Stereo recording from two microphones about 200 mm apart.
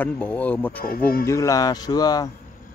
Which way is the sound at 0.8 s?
50° left (ahead or behind).